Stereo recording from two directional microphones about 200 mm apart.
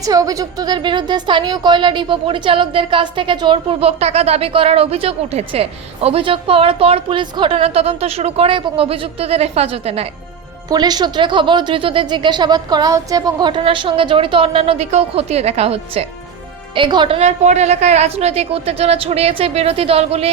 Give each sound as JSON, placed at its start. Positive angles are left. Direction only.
{"t": 0.0, "sound": "a woman's voice", "side_deg": -15}
{"t": 10.7, "sound": "a woman's voice", "side_deg": -20}